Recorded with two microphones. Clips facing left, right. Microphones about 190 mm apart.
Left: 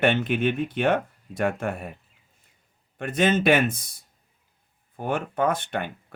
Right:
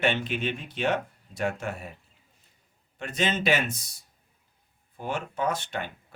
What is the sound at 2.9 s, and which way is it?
Speech, 55° left (ahead or behind).